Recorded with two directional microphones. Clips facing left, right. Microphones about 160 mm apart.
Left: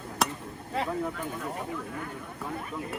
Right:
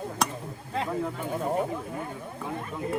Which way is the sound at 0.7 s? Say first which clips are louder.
Right 1 dB; 5° left (ahead or behind).